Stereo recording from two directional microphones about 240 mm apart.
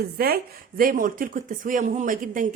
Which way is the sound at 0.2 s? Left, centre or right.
Right.